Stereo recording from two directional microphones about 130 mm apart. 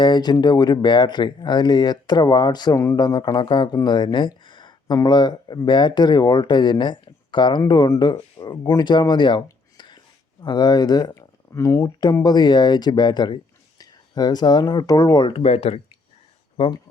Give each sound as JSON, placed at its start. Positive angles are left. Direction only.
{"t": 0.0, "sound": "speech", "side_deg": 35}
{"t": 3.8, "sound": "a sound", "side_deg": 35}
{"t": 5.0, "sound": "speech", "side_deg": 35}
{"t": 15.3, "sound": "speech", "side_deg": 50}